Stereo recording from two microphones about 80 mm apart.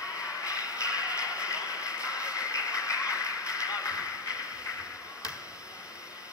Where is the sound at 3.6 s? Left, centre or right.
Left.